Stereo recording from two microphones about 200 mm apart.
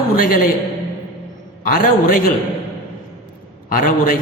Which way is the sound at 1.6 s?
45° left (ahead or behind).